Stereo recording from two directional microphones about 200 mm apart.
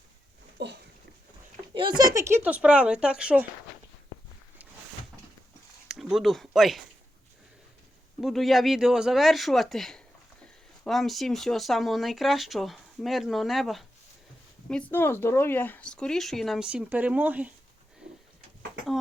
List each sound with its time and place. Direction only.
0.6 s a sound: 60° right (ahead or behind)
1.7 s speech: 25° right (ahead or behind); by 3.4 s 5° right (ahead or behind)
5.9 s speech: centre (ahead or behind)
8.2 s speech: centre (ahead or behind)